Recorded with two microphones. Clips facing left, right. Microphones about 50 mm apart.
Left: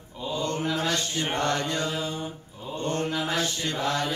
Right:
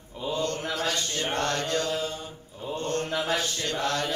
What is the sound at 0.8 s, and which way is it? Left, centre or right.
Mantra, centre.